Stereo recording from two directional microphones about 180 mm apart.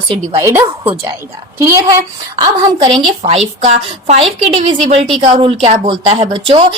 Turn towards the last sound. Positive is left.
turn(degrees=-30)  # may be behind; listen again after turning